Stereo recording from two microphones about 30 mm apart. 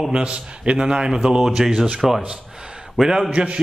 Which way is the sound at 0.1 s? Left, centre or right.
Right.